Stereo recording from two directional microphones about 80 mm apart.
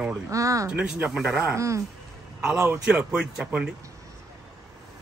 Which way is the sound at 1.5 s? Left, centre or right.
Right.